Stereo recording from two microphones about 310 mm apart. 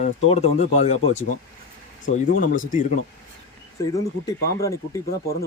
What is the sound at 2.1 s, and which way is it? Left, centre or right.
Speech, left.